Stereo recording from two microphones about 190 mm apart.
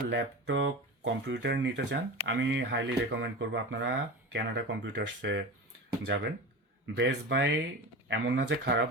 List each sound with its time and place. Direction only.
0.1 s speech: 70° right (ahead or behind)